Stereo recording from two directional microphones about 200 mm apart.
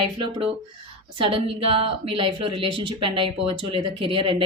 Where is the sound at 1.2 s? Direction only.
25° right (ahead or behind).